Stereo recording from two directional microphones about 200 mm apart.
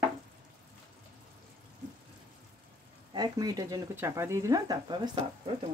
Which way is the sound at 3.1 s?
20° right (ahead or behind).